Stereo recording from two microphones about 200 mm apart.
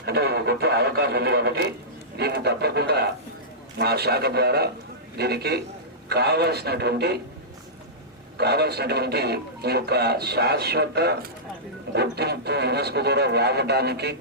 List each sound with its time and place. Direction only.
0.0 s speech: 55° right (ahead or behind)
8.4 s speech: 55° right (ahead or behind)